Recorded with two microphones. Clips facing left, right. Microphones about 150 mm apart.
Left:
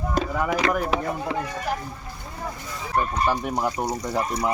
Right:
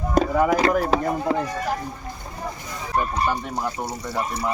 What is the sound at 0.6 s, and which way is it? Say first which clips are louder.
Chopping: right 3 dB; 35° right (ahead or behind).